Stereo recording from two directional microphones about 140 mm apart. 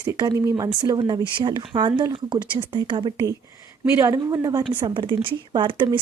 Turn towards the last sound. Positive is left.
turn(degrees=-35)  # may be behind; listen again after turning